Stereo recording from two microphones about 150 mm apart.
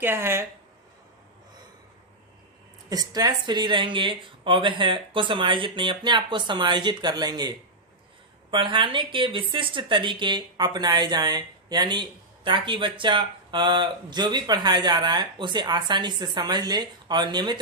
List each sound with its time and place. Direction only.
0.0 s speech: 15° right (ahead or behind)
2.9 s speech: 25° right (ahead or behind)